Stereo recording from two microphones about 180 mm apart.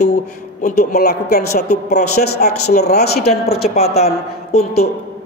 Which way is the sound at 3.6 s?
35° left (ahead or behind).